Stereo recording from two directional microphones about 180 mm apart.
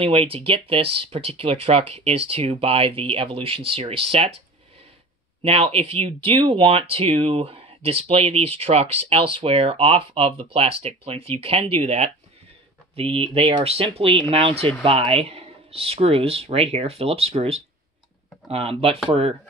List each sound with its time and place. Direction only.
0.0 s speech: 30° right (ahead or behind)
5.4 s speech: 30° right (ahead or behind)